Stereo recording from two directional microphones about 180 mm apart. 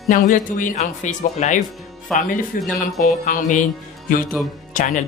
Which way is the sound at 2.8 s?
50° left (ahead or behind).